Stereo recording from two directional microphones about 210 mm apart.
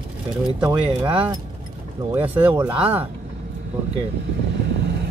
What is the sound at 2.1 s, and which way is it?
Speech, 10° right (ahead or behind).